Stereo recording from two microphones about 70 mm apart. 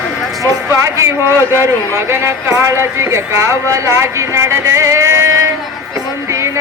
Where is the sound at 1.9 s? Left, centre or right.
Right.